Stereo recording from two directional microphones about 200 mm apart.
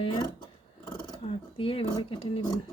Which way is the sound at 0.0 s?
25° left (ahead or behind).